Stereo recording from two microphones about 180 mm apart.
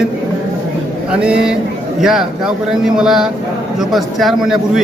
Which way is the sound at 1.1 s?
5° right (ahead or behind).